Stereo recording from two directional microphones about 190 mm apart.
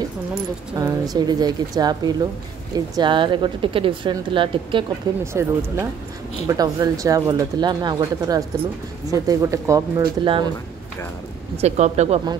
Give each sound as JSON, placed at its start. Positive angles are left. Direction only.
{"t": 0.7, "sound": "speech", "side_deg": -20}
{"t": 5.2, "sound": "speech", "side_deg": -15}
{"t": 10.2, "sound": "speech", "side_deg": -25}
{"t": 11.5, "sound": "speech", "side_deg": -35}